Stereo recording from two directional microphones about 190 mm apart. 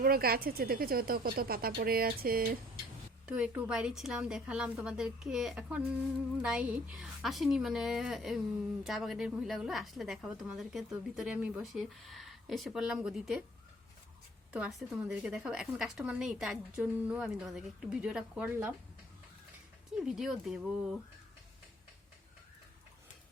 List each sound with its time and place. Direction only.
0.0 s speech: 50° right (ahead or behind)
3.2 s a woman's voice: 5° right (ahead or behind)
14.5 s a woman's voice: 5° right (ahead or behind)
20.0 s a woman's voice: 5° right (ahead or behind)